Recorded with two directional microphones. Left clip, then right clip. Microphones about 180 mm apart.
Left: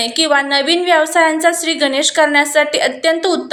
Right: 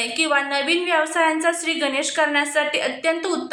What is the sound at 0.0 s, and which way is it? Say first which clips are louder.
A woman's voice: left 6 dB; 25° left (ahead or behind).